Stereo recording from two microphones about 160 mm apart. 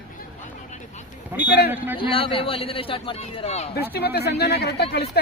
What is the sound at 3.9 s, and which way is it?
Speech, 90° left.